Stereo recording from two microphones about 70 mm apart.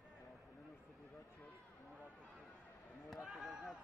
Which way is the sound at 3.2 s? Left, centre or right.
Centre.